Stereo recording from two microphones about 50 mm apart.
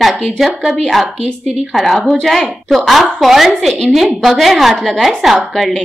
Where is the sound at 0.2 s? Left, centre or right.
Centre.